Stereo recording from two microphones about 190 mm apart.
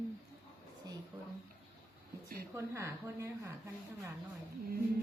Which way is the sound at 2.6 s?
15° right (ahead or behind).